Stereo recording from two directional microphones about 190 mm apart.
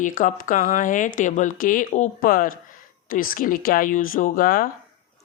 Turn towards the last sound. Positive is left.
turn(degrees=45)  # may be behind; listen again after turning